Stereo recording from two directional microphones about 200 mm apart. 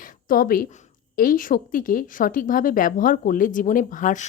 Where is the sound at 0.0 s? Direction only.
45° left (ahead or behind).